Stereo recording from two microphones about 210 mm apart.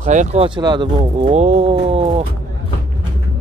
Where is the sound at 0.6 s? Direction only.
20° right (ahead or behind).